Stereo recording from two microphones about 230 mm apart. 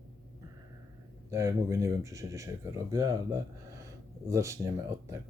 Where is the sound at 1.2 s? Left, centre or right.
Centre.